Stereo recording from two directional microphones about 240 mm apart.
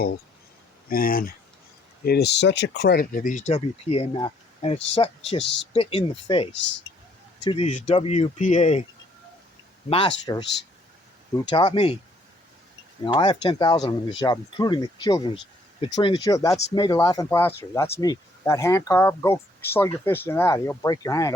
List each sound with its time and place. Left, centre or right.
0.9 s speech: left
6.5 s speech: left
7.4 s speech: left
9.9 s speech: left
11.4 s speech: centre
13.1 s speech: centre